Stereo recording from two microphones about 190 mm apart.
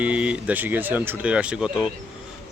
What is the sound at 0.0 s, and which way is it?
Speech, 5° right (ahead or behind).